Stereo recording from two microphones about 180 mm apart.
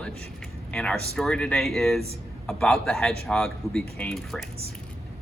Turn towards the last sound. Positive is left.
turn(degrees=5)  # may be behind; listen again after turning